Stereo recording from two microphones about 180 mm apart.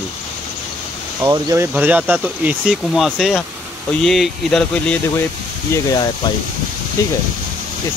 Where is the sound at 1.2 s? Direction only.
15° right (ahead or behind); by 5.0 s 5° left (ahead or behind).